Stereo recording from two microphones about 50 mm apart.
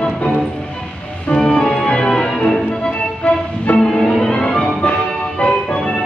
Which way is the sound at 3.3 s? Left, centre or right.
Left.